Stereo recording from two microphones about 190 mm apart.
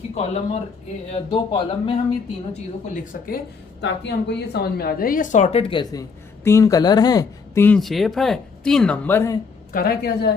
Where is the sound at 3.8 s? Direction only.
65° left (ahead or behind); by 9.4 s 15° left (ahead or behind).